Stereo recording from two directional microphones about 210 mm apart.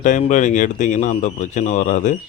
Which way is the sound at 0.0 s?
35° left (ahead or behind).